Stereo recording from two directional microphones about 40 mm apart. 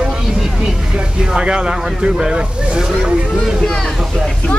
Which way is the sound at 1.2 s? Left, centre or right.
Centre.